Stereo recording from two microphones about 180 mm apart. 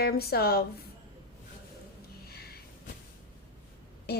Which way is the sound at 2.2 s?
60° left (ahead or behind).